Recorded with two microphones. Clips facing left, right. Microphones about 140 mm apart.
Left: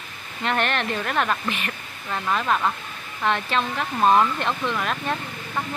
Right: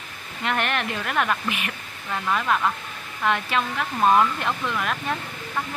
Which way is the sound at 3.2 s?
5° right (ahead or behind).